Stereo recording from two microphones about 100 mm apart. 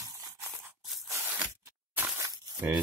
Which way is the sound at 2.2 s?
30° right (ahead or behind).